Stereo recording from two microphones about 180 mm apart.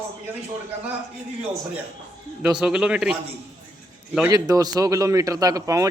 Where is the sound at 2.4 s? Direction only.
5° right (ahead or behind).